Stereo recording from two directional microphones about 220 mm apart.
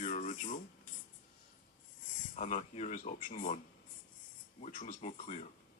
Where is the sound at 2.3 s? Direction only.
35° left (ahead or behind).